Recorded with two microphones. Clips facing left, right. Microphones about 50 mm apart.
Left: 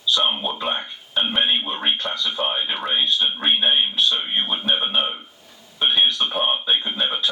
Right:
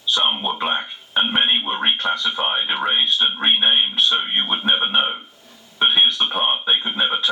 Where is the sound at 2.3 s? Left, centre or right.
Centre.